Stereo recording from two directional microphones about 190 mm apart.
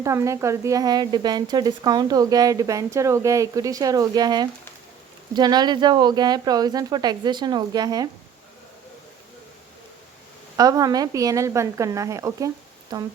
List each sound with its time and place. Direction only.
0.0 s speech: 15° right (ahead or behind)
10.6 s speech: 20° right (ahead or behind)